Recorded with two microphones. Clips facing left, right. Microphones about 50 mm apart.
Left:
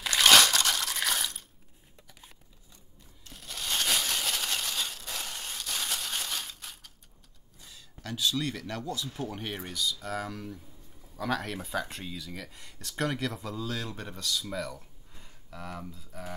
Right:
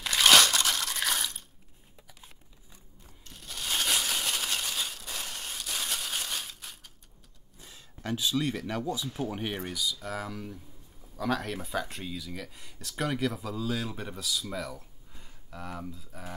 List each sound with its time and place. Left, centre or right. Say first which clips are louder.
0.0 s a sound: even; centre
3.3 s crushing: even; centre
7.5 s speech: right 1 dB; right; by 16.3 s centre